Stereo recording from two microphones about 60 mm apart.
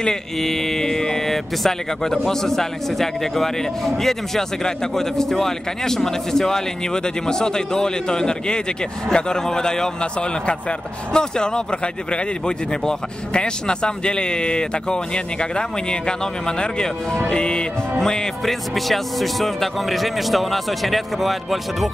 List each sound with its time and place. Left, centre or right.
0.0 s speech: centre
11.1 s speech: centre